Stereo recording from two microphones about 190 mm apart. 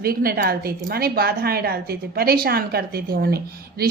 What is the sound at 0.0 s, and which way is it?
A woman's voice, 50° right (ahead or behind).